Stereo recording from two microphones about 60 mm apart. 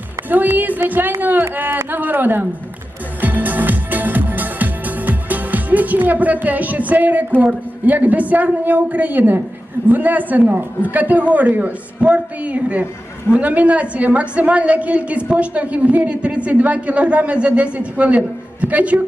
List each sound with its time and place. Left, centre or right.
0.3 s speech: right
3.2 s music: right
7.4 s a woman's voice: right